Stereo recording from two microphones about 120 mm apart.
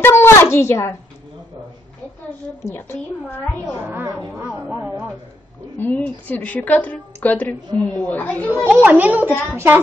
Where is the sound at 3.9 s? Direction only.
15° right (ahead or behind).